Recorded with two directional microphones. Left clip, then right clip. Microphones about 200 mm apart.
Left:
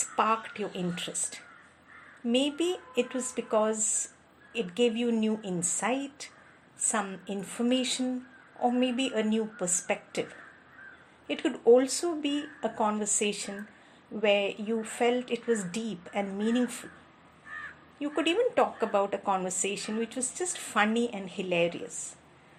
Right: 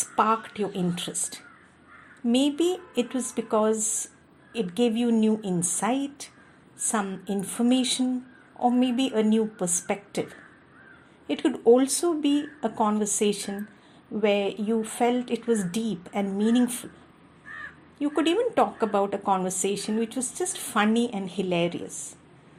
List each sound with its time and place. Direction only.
0.2 s a woman's voice: 25° right (ahead or behind)
11.3 s a woman's voice: 25° right (ahead or behind)
18.0 s a woman's voice: 25° right (ahead or behind)